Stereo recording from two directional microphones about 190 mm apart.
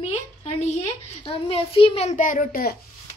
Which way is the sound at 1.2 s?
30° left (ahead or behind).